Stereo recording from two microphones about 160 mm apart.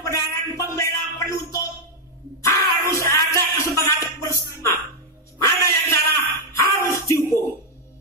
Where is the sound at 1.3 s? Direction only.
20° left (ahead or behind).